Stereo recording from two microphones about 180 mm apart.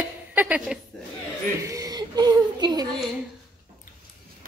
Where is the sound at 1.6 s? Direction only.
20° right (ahead or behind).